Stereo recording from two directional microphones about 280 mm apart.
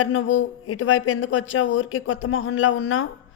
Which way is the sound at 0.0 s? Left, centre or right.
Left.